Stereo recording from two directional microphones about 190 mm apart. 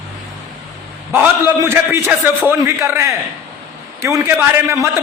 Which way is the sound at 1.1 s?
10° right (ahead or behind).